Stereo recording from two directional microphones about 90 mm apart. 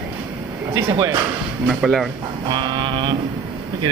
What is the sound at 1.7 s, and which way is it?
Speech, centre (ahead or behind).